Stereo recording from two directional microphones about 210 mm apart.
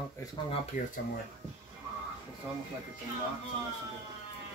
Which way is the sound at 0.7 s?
35° left (ahead or behind).